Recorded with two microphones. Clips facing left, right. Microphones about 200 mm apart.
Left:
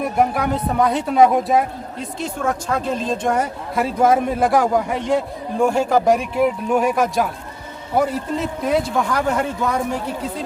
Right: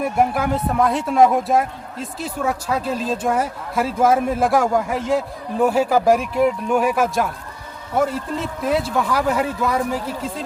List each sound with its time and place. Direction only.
0.0 s speech: centre (ahead or behind)